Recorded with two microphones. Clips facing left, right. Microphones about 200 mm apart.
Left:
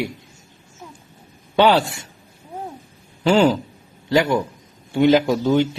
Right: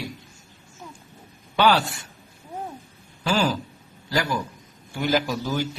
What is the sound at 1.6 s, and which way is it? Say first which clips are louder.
Speech: left 5 dB; 25° left (ahead or behind).